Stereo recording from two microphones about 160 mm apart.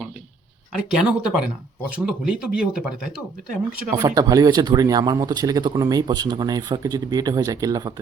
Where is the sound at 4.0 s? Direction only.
20° right (ahead or behind).